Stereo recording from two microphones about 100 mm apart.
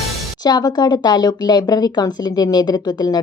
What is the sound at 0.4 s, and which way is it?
Speech, 40° left (ahead or behind).